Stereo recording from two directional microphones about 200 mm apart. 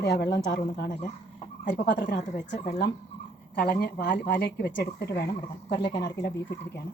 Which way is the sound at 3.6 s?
50° left (ahead or behind).